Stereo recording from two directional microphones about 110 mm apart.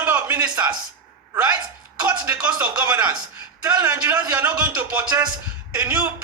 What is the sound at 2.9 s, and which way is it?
Speech, 35° right (ahead or behind).